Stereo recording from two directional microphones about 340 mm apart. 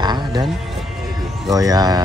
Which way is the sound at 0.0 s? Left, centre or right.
Centre.